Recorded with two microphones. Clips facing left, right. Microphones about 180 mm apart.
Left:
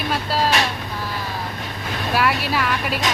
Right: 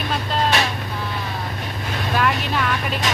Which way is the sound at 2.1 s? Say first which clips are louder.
Left 1 dB; 5° left (ahead or behind).